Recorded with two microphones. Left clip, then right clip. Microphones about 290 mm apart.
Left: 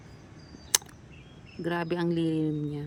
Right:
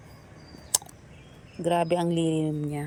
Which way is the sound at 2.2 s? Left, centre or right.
Left.